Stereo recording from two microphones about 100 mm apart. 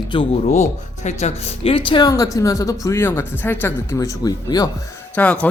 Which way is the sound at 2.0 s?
35° left (ahead or behind).